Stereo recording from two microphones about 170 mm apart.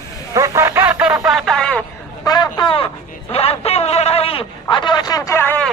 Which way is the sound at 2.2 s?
25° left (ahead or behind).